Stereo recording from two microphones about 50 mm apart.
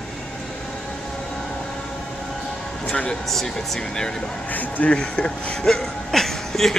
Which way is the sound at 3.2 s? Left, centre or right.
Centre.